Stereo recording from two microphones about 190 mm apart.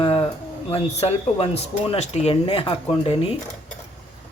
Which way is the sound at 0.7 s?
30° left (ahead or behind).